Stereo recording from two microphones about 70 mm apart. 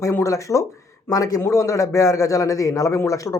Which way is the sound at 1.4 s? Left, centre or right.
Left.